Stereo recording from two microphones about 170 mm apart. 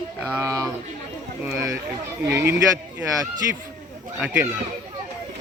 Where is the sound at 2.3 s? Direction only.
15° right (ahead or behind).